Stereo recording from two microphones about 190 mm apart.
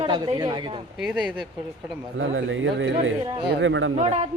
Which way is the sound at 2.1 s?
85° right.